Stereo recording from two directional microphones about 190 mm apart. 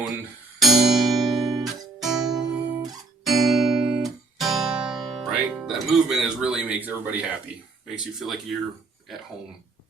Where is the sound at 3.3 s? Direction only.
Centre (ahead or behind).